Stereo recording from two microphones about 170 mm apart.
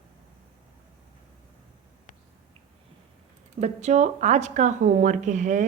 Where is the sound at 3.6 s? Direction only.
40° right (ahead or behind).